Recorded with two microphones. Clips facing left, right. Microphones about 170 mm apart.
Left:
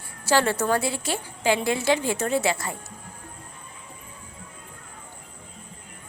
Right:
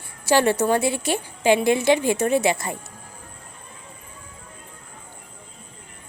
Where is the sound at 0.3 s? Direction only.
15° right (ahead or behind).